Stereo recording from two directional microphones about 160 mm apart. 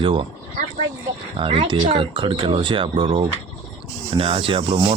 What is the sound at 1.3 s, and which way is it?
Speech, 35° right (ahead or behind).